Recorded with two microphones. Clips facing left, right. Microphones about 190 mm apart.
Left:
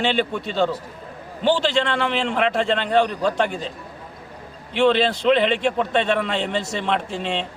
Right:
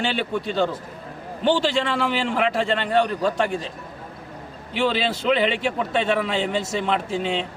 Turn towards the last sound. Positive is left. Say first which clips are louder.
# right 1 dB
turn(degrees=0)  # may be behind; listen again after turning